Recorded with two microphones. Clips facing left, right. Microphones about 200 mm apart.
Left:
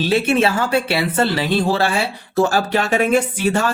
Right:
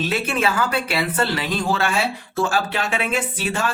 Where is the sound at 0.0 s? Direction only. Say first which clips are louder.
Left 6 dB; 30° left (ahead or behind).